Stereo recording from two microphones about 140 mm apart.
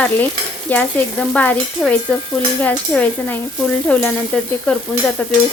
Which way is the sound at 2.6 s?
15° left (ahead or behind).